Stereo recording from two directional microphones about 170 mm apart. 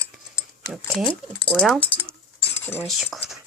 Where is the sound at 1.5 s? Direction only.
10° left (ahead or behind).